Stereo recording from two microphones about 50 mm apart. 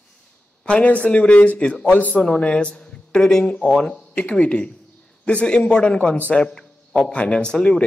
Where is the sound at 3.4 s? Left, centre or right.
Left.